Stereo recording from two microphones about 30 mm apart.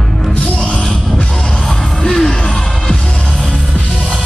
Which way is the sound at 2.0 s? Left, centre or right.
Centre.